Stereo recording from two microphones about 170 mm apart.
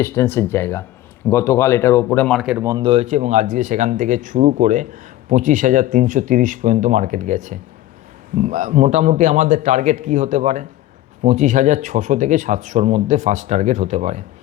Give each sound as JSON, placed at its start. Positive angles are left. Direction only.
{"t": 0.0, "sound": "speech", "side_deg": 15}
{"t": 2.6, "sound": "speech", "side_deg": -20}
{"t": 2.8, "sound": "speech", "side_deg": -35}
{"t": 3.1, "sound": "speech", "side_deg": -45}